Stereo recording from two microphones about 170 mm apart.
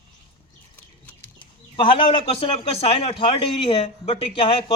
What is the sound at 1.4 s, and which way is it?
Speech, 30° left (ahead or behind).